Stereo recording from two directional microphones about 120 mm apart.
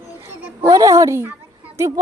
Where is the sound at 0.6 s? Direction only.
35° right (ahead or behind).